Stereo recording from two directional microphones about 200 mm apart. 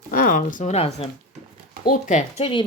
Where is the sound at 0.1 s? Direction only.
45° left (ahead or behind).